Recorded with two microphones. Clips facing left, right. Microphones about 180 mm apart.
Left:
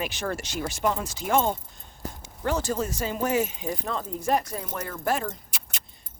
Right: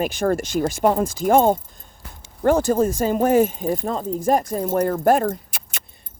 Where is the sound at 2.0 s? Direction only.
40° left (ahead or behind).